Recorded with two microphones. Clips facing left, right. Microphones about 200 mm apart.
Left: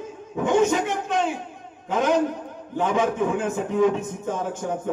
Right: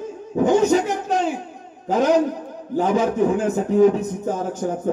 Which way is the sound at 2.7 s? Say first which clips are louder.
Right 3 dB; 35° right (ahead or behind).